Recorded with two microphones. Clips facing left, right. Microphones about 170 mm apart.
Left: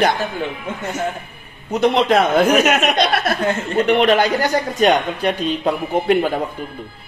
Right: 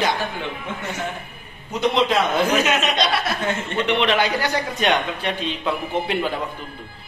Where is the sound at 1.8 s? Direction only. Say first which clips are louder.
Left 4 dB; 55° left (ahead or behind).